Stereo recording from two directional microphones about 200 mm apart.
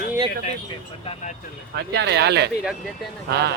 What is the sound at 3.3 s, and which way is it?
Speech, 55° right (ahead or behind).